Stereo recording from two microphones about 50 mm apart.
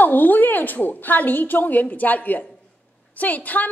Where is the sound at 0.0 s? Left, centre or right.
Left.